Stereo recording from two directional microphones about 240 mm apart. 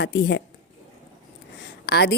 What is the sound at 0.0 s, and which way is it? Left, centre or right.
Speech, left.